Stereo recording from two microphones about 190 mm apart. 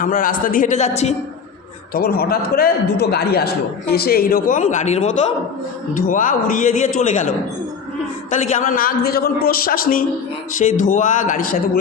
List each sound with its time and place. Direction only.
0.0 s a man's voice: 45° left (ahead or behind)
1.9 s a man's voice: 50° left (ahead or behind)
8.5 s a man's voice: 45° left (ahead or behind)